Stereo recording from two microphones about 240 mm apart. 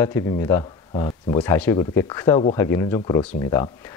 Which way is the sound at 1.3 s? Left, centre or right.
Centre.